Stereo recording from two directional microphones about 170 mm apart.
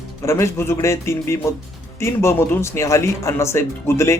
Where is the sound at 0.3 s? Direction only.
15° left (ahead or behind).